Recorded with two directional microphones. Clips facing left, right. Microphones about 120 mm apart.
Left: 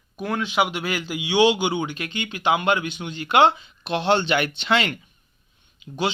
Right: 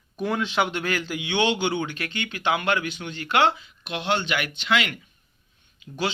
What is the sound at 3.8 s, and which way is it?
Speech, 30° left (ahead or behind).